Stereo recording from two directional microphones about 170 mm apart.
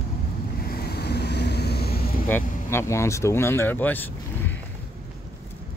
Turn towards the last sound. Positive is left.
turn(degrees=10)  # may be behind; listen again after turning